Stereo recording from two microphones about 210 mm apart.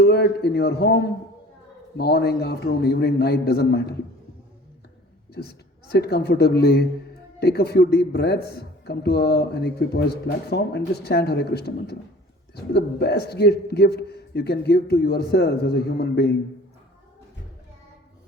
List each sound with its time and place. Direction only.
0.0 s a man's voice: 50° left (ahead or behind)
5.9 s speech: 50° left (ahead or behind)